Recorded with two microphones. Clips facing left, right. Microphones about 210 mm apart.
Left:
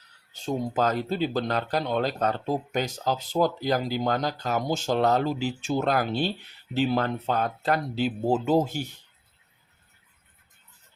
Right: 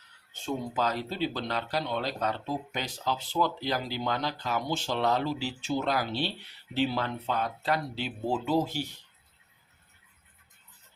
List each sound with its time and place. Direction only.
0.3 s speech: 45° left (ahead or behind)